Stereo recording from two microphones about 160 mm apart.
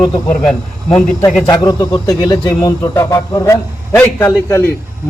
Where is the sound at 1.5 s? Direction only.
25° left (ahead or behind).